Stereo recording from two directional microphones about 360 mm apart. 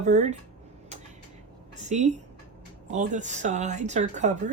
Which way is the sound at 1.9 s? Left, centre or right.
Centre.